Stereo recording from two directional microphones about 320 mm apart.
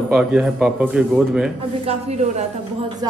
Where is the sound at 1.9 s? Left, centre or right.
Centre.